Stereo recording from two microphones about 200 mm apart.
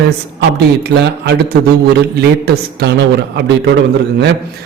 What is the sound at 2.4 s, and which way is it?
Speech, 50° right (ahead or behind).